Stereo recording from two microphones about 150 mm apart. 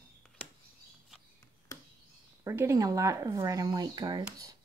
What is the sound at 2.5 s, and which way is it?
Speech, 20° right (ahead or behind).